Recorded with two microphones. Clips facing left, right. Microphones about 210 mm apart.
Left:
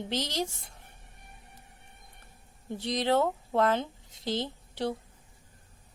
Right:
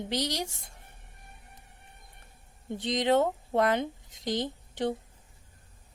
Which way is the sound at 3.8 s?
90° right.